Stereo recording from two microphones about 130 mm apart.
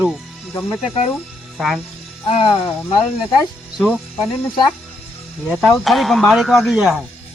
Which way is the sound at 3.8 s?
Centre (ahead or behind).